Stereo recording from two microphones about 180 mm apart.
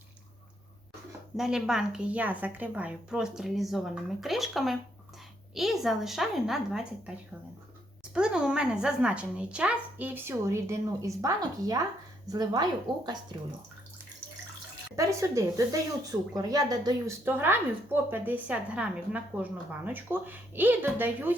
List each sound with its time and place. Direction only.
1.4 s a woman's voice: 5° right (ahead or behind)
8.1 s a woman's voice: 5° right (ahead or behind); by 13.0 s 25° right (ahead or behind)
14.9 s a woman's voice: 15° right (ahead or behind)